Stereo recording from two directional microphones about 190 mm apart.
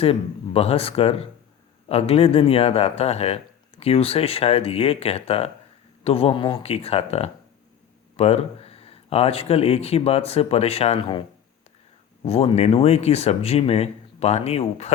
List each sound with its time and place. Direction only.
0.0 s speech: 30° left (ahead or behind)
12.2 s speech: 30° left (ahead or behind)